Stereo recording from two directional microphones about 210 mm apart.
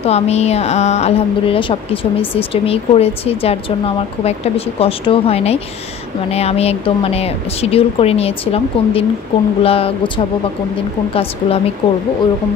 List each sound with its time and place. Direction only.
0.0 s a woman's voice: 30° left (ahead or behind)